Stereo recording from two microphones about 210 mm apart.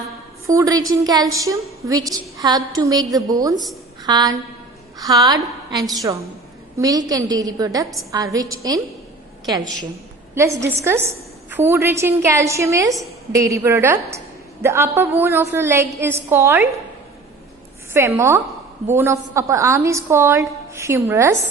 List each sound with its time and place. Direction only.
0.4 s a woman's voice: 15° right (ahead or behind)
17.9 s a woman's voice: 10° right (ahead or behind)